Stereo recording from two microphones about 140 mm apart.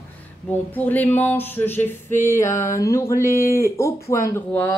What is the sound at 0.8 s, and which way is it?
Speech, 10° left (ahead or behind).